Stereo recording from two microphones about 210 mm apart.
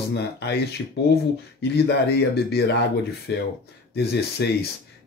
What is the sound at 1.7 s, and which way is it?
Speech, 50° left (ahead or behind).